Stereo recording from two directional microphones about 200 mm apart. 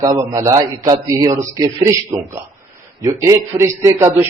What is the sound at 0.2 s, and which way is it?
A man's voice, 15° right (ahead or behind).